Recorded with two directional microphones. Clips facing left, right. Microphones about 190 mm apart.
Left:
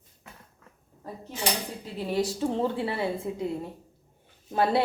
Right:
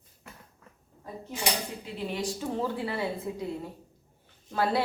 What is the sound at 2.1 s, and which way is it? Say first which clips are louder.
Speech: left 8 dB; 35° left (ahead or behind).